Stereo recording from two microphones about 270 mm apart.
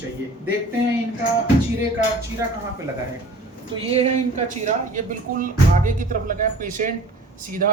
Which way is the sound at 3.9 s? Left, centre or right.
Right.